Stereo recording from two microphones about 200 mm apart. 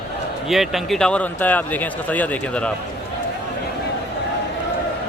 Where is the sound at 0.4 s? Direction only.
Centre (ahead or behind).